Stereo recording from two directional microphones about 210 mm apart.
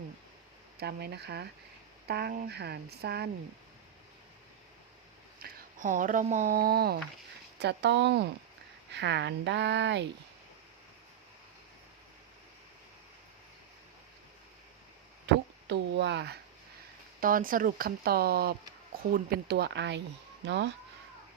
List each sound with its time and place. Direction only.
0.8 s speech: 50° right (ahead or behind)
5.4 s speech: 40° right (ahead or behind); by 10.1 s 55° right (ahead or behind)
15.3 s a sound: 55° right (ahead or behind)
17.2 s speech: 40° right (ahead or behind)